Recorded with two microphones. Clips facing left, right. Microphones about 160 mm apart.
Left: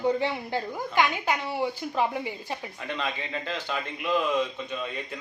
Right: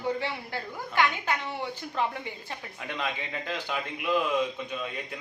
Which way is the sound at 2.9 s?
10° right (ahead or behind).